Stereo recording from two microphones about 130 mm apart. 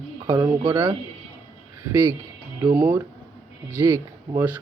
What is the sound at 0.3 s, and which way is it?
Speech, 30° right (ahead or behind).